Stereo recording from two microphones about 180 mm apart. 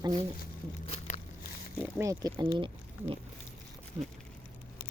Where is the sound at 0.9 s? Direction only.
35° left (ahead or behind).